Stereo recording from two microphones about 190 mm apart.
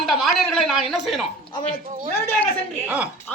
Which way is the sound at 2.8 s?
5° right (ahead or behind).